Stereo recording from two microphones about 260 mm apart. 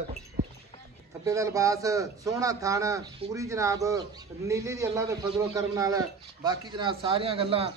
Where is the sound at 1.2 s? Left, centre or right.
Centre.